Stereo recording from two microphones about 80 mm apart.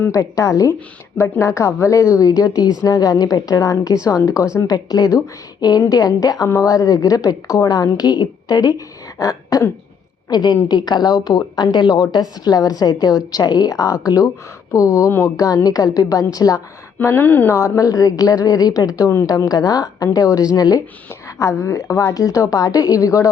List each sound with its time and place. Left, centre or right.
0.1 s a woman's voice: left
9.1 s throat clearing: left
10.2 s a woman's voice: left
15.4 s a woman's voice: left
17.0 s speech: left
17.5 s a woman's voice: left
21.3 s a woman's voice: left